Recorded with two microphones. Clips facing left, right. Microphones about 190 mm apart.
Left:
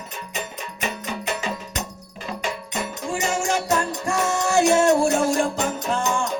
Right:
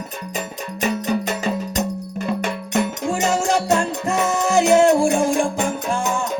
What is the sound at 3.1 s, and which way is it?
Music, 45° right (ahead or behind).